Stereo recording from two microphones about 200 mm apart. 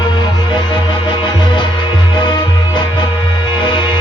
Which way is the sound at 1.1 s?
25° left (ahead or behind).